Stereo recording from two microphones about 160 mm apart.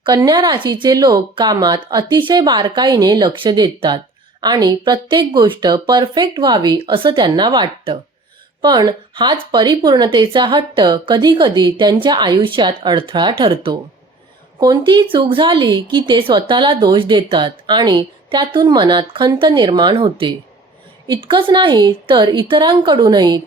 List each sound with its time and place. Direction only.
0.0 s speech: 25° right (ahead or behind)